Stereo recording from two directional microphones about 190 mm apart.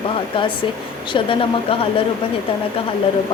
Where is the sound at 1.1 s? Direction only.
30° left (ahead or behind).